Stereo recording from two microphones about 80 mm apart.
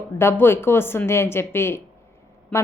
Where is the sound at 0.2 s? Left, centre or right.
Left.